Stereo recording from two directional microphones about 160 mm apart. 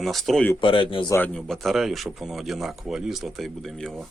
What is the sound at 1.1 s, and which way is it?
Speech, 15° left (ahead or behind).